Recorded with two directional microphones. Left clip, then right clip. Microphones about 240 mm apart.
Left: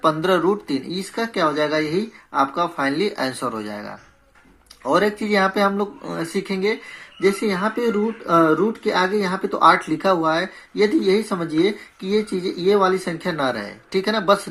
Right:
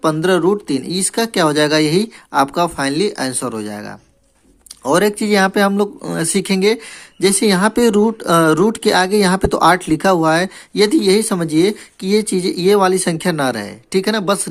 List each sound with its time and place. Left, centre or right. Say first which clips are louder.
0.0 s speech: right 3 dB; right